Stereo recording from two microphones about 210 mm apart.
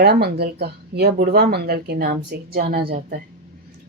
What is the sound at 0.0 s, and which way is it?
Speech, 50° right (ahead or behind).